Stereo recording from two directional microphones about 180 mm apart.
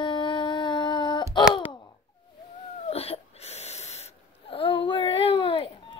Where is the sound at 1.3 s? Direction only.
25° left (ahead or behind).